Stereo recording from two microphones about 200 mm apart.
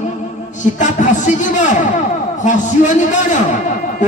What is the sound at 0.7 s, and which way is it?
Speech, 40° left (ahead or behind).